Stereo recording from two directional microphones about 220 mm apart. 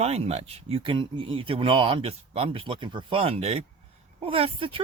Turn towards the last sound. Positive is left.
turn(degrees=-25)  # may be behind; listen again after turning